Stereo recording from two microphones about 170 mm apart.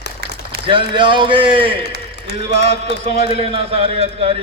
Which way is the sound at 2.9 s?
40° right (ahead or behind).